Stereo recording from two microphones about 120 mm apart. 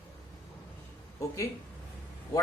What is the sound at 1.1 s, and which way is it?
Speech, 25° left (ahead or behind).